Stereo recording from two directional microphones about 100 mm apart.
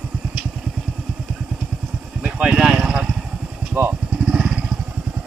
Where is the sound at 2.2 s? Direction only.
10° right (ahead or behind).